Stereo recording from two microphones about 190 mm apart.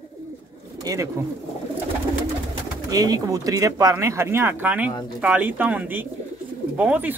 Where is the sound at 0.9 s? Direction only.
20° right (ahead or behind).